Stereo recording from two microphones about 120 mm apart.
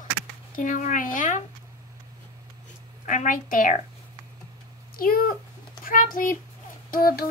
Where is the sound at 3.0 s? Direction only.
90° left.